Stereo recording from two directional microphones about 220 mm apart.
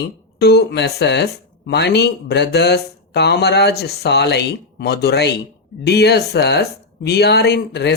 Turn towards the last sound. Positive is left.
turn(degrees=50)  # may be behind; listen again after turning